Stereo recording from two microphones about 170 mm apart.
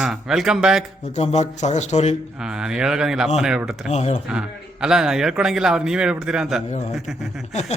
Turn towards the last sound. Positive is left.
turn(degrees=40)  # may be behind; listen again after turning